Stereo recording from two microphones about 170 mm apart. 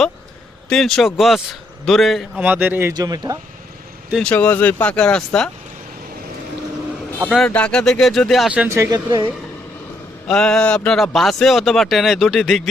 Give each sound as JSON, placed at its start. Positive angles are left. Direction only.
{"t": 0.7, "sound": "speech", "side_deg": 5}
{"t": 2.9, "sound": "speech", "side_deg": -20}
{"t": 4.1, "sound": "speech", "side_deg": 5}
{"t": 7.3, "sound": "speech", "side_deg": 5}
{"t": 10.2, "sound": "speech", "side_deg": 5}